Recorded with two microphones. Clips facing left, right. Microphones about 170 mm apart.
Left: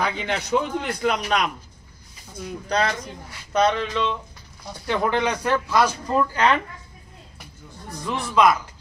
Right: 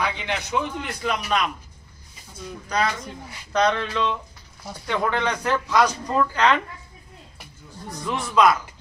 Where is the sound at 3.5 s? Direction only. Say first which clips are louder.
Left 1 dB; 5° left (ahead or behind).